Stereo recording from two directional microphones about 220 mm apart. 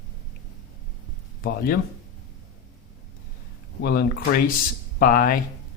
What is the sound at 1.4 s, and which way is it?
Speech, 40° left (ahead or behind).